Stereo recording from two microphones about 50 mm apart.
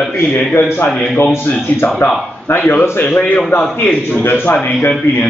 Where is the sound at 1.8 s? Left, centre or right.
Left.